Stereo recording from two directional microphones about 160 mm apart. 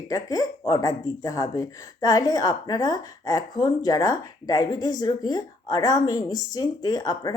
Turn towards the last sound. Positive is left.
turn(degrees=25)  # may be behind; listen again after turning